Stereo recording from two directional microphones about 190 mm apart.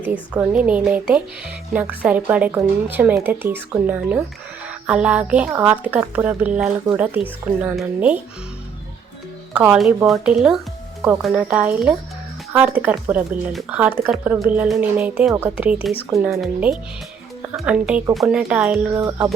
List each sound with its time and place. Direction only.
0.0 s speech: 5° right (ahead or behind)
9.6 s speech: 5° right (ahead or behind)
18.9 s speech: 15° right (ahead or behind)